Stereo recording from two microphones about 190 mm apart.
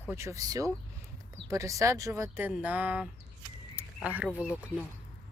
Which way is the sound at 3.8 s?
10° right (ahead or behind).